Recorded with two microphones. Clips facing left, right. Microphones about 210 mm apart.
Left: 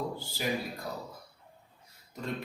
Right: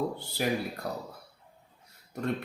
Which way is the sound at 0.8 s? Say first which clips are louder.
Right 3 dB; 65° right (ahead or behind).